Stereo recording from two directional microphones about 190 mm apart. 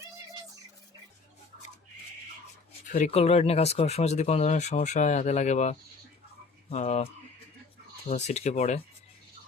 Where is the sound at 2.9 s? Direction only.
35° left (ahead or behind).